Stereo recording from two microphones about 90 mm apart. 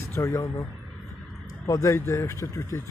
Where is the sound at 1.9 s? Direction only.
25° left (ahead or behind).